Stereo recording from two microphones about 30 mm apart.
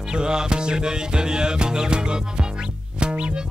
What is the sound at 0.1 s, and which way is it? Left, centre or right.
Music, right.